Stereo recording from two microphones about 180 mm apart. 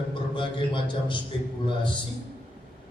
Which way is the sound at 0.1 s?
25° left (ahead or behind).